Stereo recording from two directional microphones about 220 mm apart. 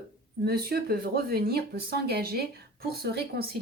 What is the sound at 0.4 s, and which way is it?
A woman's voice, 45° right (ahead or behind).